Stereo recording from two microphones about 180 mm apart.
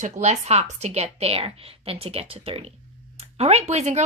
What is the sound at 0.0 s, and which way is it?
Speech, 40° right (ahead or behind).